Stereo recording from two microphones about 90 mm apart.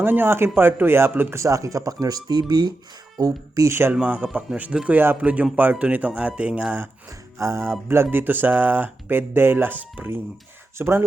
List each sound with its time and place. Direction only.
0.0 s speech: 25° right (ahead or behind); by 3.7 s 45° right (ahead or behind)
3.7 s speech: 25° right (ahead or behind)
7.3 s speech: 30° right (ahead or behind)
8.1 s speech: 20° right (ahead or behind)